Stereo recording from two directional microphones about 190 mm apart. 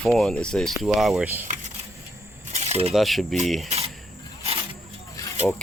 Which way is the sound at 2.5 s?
35° right (ahead or behind).